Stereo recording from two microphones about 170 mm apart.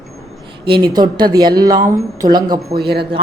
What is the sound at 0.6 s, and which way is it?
A woman's voice, 30° right (ahead or behind).